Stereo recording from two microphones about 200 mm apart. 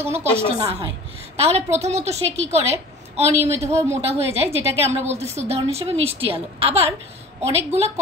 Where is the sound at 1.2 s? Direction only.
30° right (ahead or behind).